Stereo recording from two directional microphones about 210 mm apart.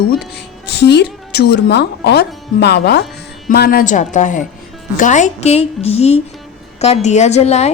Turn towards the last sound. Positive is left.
turn(degrees=30)  # may be behind; listen again after turning